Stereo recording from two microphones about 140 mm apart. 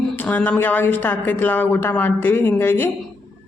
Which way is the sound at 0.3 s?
10° left (ahead or behind).